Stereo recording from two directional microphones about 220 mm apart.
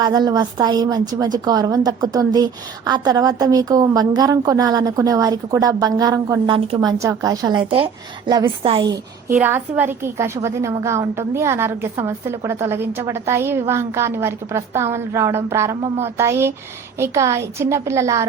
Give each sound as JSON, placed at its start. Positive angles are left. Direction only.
{"t": 0.0, "sound": "a woman's voice", "side_deg": -20}
{"t": 9.3, "sound": "a woman's voice", "side_deg": -10}